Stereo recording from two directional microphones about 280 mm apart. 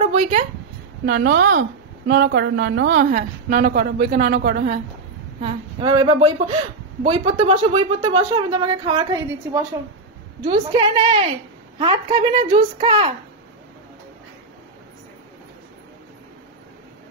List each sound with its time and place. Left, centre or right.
0.0 s a sound: right
1.0 s a woman's voice: right
5.4 s speech: centre